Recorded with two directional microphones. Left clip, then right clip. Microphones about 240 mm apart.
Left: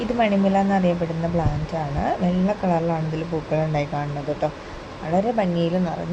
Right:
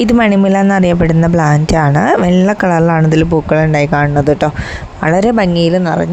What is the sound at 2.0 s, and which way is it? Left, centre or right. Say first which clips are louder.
Speech: right 10 dB; right.